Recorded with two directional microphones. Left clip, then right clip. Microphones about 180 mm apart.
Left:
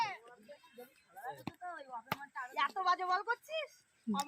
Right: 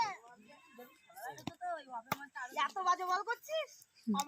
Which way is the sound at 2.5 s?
Centre (ahead or behind).